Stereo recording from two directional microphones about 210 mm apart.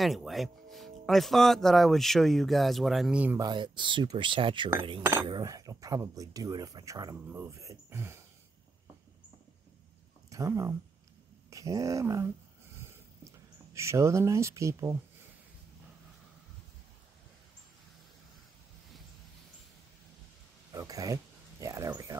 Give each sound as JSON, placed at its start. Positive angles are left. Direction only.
{"t": 0.0, "sound": "speech", "side_deg": 0}
{"t": 3.4, "sound": "speech", "side_deg": -20}
{"t": 10.3, "sound": "speech", "side_deg": -15}
{"t": 12.7, "sound": "a sound", "side_deg": -15}
{"t": 13.7, "sound": "speech", "side_deg": -15}
{"t": 20.7, "sound": "speech", "side_deg": -15}